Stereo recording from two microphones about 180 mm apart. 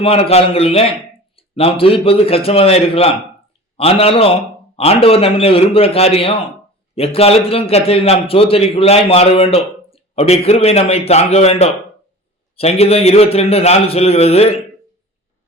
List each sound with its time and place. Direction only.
0.0 s a man's voice: 35° left (ahead or behind)